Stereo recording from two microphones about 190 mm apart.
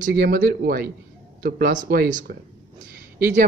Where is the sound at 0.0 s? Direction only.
45° right (ahead or behind).